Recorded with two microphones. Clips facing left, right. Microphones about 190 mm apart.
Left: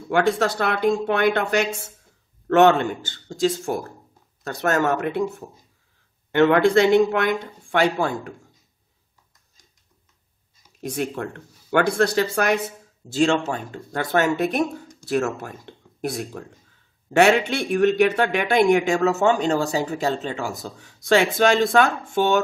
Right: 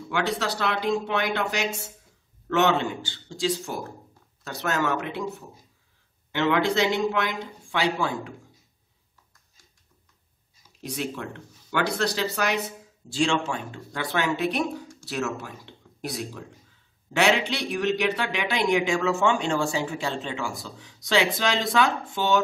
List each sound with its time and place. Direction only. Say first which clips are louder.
0.1 s speech: left 7 dB; 50° left (ahead or behind)
10.8 s speech: left 5 dB; 50° left (ahead or behind)